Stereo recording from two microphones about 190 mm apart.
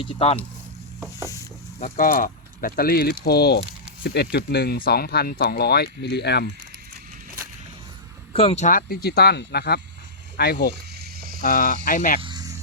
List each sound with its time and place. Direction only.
0.0 s speech: 30° left (ahead or behind)
0.9 s stir: 10° right (ahead or behind)
1.8 s speech: 45° left (ahead or behind)
8.3 s speech: 30° left (ahead or behind); by 10.7 s 60° left (ahead or behind)
11.3 s speech: 45° left (ahead or behind)
12.2 s cricket: 20° right (ahead or behind)